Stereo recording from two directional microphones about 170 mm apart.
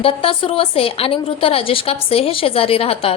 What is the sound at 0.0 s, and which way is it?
A woman's voice, 30° left (ahead or behind).